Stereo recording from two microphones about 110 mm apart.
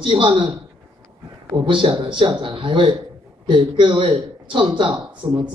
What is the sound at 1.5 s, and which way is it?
Speech, 50° right (ahead or behind).